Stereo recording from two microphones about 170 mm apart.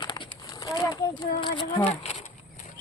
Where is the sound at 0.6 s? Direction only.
20° left (ahead or behind).